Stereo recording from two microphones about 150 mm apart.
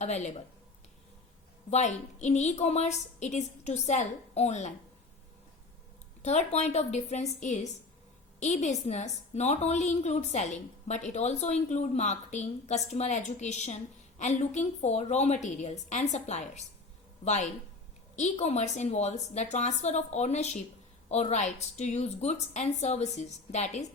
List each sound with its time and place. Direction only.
0.0 s a woman's voice: 50° left (ahead or behind)
1.7 s a woman's voice: 50° left (ahead or behind)
6.2 s a woman's voice: 50° left (ahead or behind)